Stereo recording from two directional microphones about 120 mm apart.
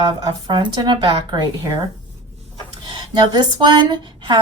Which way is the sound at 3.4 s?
40° right (ahead or behind).